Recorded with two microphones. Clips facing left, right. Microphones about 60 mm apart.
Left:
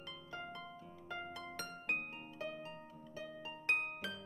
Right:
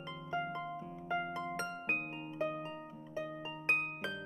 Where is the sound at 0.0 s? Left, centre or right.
Right.